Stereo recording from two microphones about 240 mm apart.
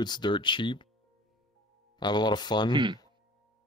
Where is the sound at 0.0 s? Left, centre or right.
Centre.